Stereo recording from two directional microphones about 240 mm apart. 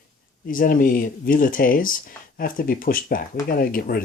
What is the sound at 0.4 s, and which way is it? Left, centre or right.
Speech, left.